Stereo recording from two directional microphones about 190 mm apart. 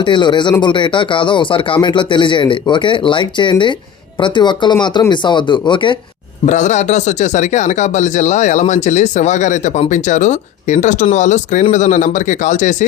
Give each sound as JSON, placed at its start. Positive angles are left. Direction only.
{"t": 0.0, "sound": "speech", "side_deg": 25}
{"t": 6.4, "sound": "speech", "side_deg": 40}